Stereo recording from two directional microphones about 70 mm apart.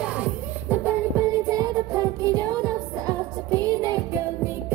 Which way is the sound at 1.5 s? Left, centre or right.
Right.